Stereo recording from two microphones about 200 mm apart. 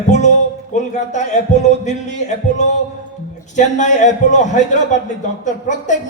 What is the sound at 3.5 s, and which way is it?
A man's voice, 35° left (ahead or behind).